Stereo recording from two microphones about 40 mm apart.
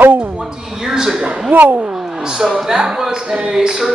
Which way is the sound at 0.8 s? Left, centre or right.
Centre.